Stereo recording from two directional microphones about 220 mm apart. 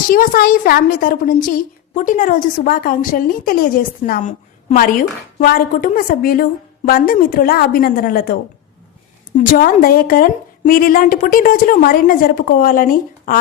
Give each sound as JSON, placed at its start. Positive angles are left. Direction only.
{"t": 0.1, "sound": "a woman's voice", "side_deg": 40}
{"t": 9.4, "sound": "a woman's voice", "side_deg": 40}